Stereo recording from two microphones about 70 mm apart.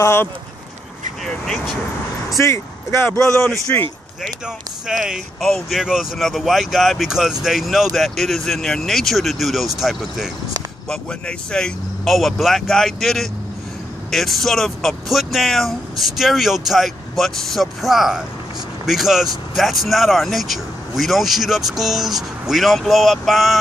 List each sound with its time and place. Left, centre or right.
0.0 s speech: left
1.2 s speech: centre
2.3 s speech: left
4.5 s speech: centre
5.4 s speech: centre
10.9 s speech: centre